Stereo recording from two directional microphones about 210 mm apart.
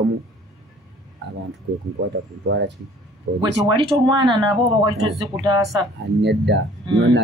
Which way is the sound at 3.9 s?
25° right (ahead or behind).